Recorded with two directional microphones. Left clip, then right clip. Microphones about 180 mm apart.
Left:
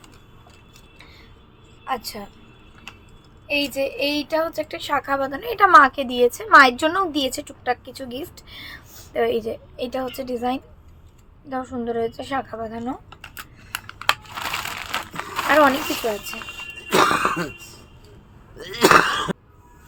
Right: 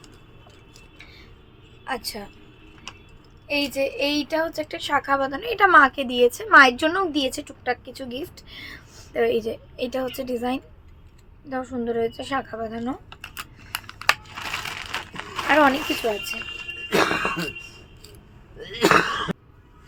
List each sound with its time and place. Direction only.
1.9 s a woman's voice: 5° right (ahead or behind)
2.9 s typing: 10° right (ahead or behind)
3.4 s a woman's voice: 10° right (ahead or behind)
11.4 s a sound: 5° right (ahead or behind)
14.3 s crushing: 30° left (ahead or behind)
15.4 s speech: centre (ahead or behind)
16.9 s cough: 60° left (ahead or behind)
18.6 s a sound: 60° left (ahead or behind)